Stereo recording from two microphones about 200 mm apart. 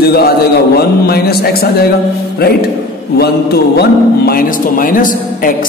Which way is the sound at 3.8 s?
50° left (ahead or behind).